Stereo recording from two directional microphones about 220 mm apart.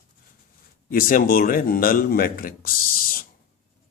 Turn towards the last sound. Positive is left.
turn(degrees=40)  # may be behind; listen again after turning